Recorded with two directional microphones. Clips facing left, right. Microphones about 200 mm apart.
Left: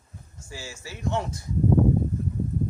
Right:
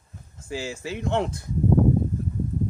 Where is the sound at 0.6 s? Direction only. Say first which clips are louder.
Right 3 dB; 60° right (ahead or behind).